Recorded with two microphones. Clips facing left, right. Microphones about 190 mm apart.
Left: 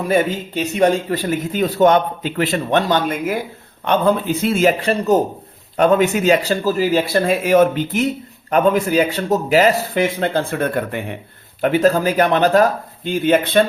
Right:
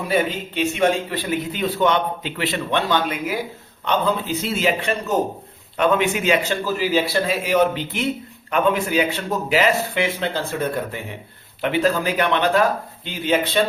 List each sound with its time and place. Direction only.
0.0 s a man's voice: 45° left (ahead or behind)
5.7 s a man's voice: 40° left (ahead or behind); by 11.2 s 60° left (ahead or behind)
11.6 s a man's voice: 45° left (ahead or behind)
13.1 s a man's voice: 55° left (ahead or behind)